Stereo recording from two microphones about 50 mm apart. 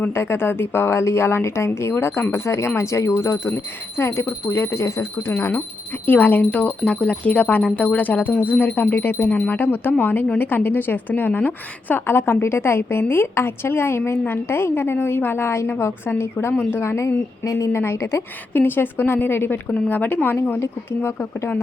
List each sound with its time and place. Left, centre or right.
0.1 s a woman's voice: left
1.9 s a woman's voice: left
2.3 s speech: left
3.2 s a woman's voice: left
6.1 s a woman's voice: left
12.0 s a woman's voice: left
16.8 s speech: left
17.4 s a woman's voice: left
17.7 s a woman's voice: left
18.5 s a woman's voice: left